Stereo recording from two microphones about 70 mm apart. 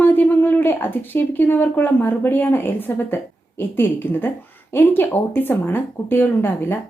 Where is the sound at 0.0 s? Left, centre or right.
Left.